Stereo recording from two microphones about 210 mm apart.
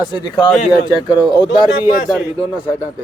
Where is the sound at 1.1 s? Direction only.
15° left (ahead or behind).